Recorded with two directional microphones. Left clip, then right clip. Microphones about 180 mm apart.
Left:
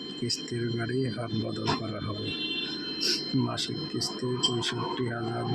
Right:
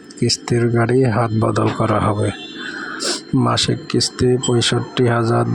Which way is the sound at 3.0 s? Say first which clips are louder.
Right 10 dB; 45° right (ahead or behind).